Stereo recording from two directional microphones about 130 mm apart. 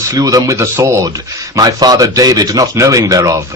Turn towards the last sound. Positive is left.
turn(degrees=-25)  # may be behind; listen again after turning